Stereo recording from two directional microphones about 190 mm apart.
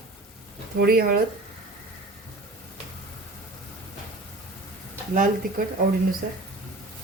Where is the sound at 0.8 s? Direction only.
50° right (ahead or behind).